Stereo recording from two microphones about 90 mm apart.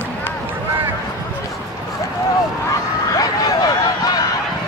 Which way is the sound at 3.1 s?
40° left (ahead or behind).